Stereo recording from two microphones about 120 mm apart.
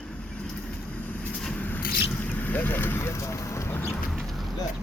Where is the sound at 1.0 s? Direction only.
15° left (ahead or behind).